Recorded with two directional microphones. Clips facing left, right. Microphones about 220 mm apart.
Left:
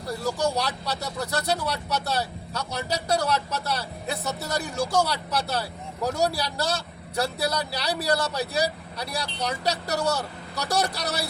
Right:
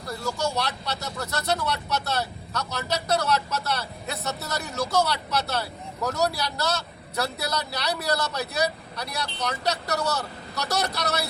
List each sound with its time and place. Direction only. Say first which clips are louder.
0.5 s speech: left 1 dB; 35° left (ahead or behind)